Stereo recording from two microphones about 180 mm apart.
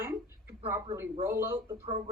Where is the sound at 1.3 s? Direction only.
15° right (ahead or behind).